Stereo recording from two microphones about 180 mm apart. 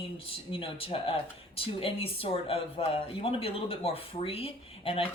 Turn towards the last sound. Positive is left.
turn(degrees=30)  # may be behind; listen again after turning